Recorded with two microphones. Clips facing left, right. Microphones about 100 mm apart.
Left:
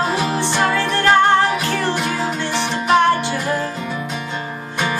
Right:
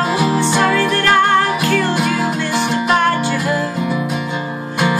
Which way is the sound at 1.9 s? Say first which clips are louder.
Right 4 dB; 5° right (ahead or behind).